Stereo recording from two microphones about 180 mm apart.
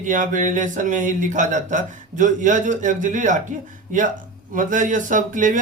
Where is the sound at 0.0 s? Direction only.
45° right (ahead or behind).